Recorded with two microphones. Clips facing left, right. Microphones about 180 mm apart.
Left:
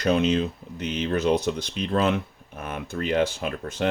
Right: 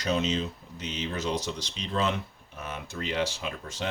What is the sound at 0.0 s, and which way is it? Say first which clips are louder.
Speech: left 6 dB; 60° left (ahead or behind).